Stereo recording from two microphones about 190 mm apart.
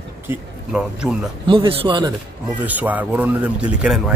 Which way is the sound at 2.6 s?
10° right (ahead or behind).